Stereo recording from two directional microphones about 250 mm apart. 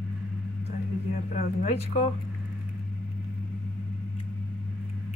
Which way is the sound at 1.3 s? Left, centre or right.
Left.